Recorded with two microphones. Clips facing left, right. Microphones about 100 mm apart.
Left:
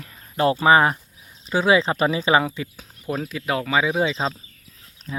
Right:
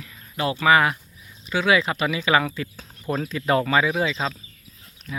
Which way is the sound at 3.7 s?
15° left (ahead or behind).